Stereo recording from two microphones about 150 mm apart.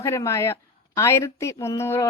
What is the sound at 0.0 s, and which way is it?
A woman's voice, 20° left (ahead or behind).